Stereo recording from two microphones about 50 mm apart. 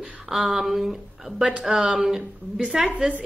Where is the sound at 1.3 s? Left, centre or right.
Centre.